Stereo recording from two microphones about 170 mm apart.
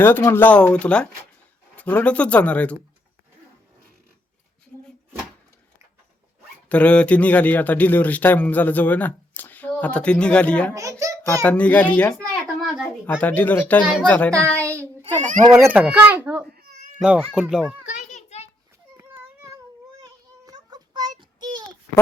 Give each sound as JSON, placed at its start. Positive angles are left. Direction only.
{"t": 0.0, "sound": "a man's voice", "side_deg": 15}
{"t": 6.7, "sound": "a man's voice", "side_deg": 5}
{"t": 10.8, "sound": "a child's voice", "side_deg": -20}
{"t": 11.4, "sound": "a child's voice", "side_deg": 10}
{"t": 13.1, "sound": "a man's voice", "side_deg": 10}
{"t": 14.6, "sound": "a child's voice", "side_deg": -15}
{"t": 15.0, "sound": "a child's voice", "side_deg": -45}
{"t": 15.6, "sound": "a child's voice", "side_deg": -10}
{"t": 16.6, "sound": "cat", "side_deg": -65}
{"t": 17.0, "sound": "a child's voice", "side_deg": -5}
{"t": 17.8, "sound": "children playing", "side_deg": 45}
{"t": 18.9, "sound": "children playing", "side_deg": -15}
{"t": 20.4, "sound": "child singing", "side_deg": -25}